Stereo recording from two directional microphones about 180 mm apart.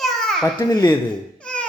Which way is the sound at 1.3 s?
5° left (ahead or behind).